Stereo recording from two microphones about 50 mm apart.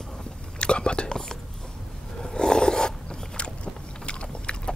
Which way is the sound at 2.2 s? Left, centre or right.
Centre.